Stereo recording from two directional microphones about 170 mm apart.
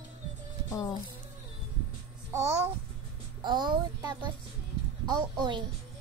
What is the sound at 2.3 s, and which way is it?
Speech, 15° right (ahead or behind).